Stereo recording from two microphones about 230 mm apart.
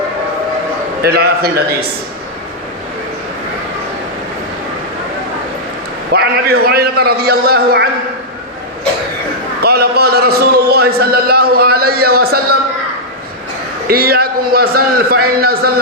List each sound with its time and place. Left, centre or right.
1.0 s a man's voice: right
6.1 s a man's voice: right
9.6 s a man's voice: right
13.8 s a man's voice: right